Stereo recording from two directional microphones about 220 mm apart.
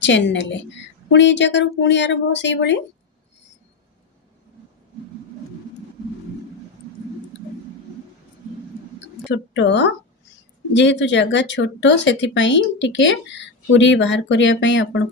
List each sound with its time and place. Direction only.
0.0 s speech: 55° left (ahead or behind)
9.3 s a woman's voice: 55° left (ahead or behind)